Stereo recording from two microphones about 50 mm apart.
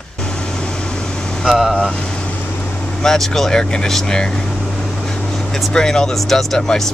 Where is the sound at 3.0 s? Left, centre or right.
Centre.